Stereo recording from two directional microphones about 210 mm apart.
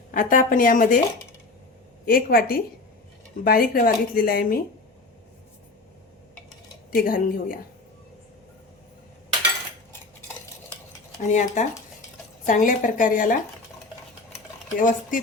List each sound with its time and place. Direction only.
0.1 s speech: 40° left (ahead or behind)
2.0 s speech: 45° left (ahead or behind)
6.9 s speech: 45° left (ahead or behind)
11.2 s speech: 35° left (ahead or behind)
14.8 s speech: 40° left (ahead or behind)